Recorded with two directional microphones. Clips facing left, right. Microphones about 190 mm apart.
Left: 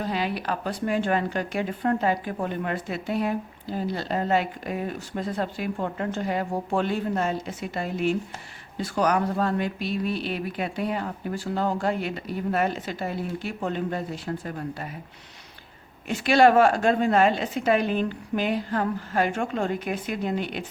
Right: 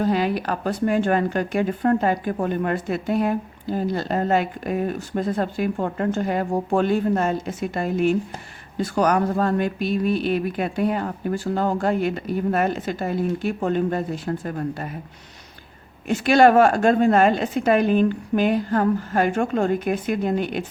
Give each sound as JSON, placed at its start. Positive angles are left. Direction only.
{"t": 0.0, "sound": "speech", "side_deg": -45}
{"t": 16.0, "sound": "speech", "side_deg": -50}